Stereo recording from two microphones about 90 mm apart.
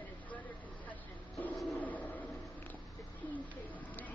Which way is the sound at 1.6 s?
15° left (ahead or behind).